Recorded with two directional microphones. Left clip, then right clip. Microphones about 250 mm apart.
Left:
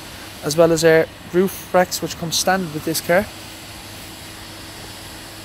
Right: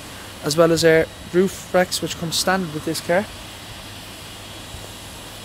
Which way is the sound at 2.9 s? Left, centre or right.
Centre.